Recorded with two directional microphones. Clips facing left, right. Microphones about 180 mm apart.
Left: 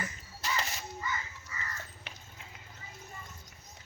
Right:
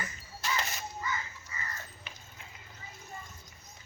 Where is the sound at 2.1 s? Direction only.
80° left.